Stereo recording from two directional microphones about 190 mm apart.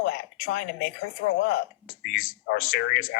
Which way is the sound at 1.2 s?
90° left.